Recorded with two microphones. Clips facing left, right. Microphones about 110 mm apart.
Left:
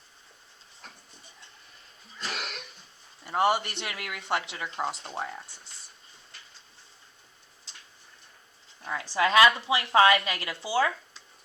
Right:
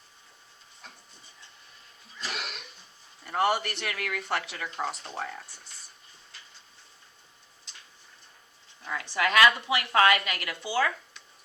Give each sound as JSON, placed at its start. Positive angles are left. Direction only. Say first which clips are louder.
{"t": 3.2, "sound": "speech", "louder": "left 1 dB", "side_deg": 25}
{"t": 8.8, "sound": "speech", "louder": "left 2 dB", "side_deg": 25}